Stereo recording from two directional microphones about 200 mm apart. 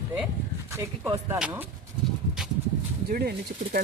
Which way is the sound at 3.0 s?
50° right (ahead or behind).